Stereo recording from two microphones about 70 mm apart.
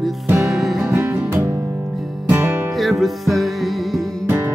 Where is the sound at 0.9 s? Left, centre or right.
Right.